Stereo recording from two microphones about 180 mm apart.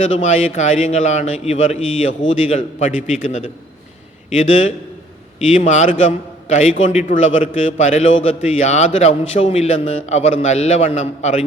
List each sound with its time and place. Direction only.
0.0 s a man's voice: 40° left (ahead or behind)